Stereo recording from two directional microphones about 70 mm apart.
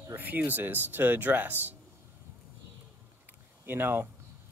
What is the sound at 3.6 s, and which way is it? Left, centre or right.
Speech, right.